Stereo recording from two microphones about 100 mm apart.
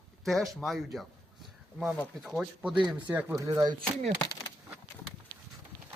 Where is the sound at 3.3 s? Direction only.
35° right (ahead or behind).